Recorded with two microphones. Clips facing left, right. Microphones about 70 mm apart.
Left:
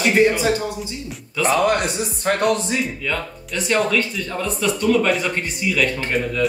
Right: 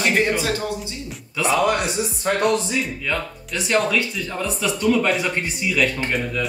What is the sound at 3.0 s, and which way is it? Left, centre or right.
Speech, centre.